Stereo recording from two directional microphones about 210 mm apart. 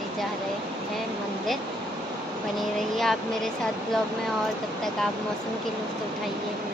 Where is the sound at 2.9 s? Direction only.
Centre (ahead or behind).